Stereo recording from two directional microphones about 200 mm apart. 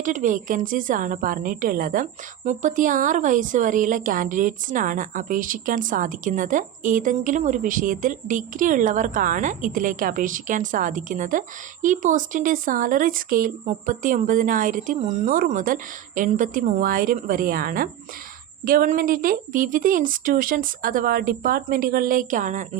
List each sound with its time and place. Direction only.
0.0 s a woman's voice: 40° right (ahead or behind)